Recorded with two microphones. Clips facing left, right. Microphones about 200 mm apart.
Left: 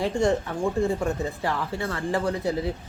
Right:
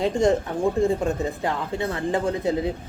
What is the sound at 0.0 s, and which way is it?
Speech, 20° right (ahead or behind).